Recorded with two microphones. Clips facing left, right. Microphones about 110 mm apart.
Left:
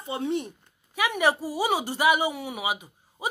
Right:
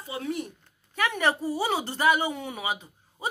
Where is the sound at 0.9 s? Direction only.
10° left (ahead or behind).